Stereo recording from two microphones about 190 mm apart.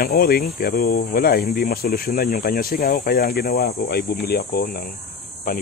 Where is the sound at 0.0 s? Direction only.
55° left (ahead or behind).